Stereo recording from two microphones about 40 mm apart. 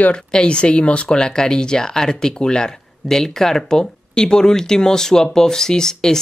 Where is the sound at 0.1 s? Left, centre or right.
Left.